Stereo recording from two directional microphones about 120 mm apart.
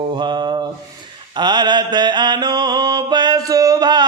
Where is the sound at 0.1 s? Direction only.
40° right (ahead or behind).